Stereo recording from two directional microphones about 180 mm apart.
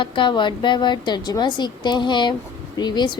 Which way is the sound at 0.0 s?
25° left (ahead or behind).